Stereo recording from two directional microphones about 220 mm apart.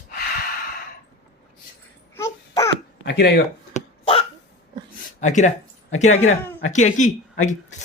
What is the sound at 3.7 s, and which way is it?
Dog, 25° left (ahead or behind).